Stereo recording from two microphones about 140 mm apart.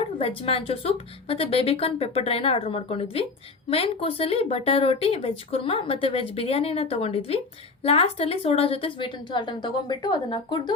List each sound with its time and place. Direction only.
0.0 s a woman's voice: 40° left (ahead or behind)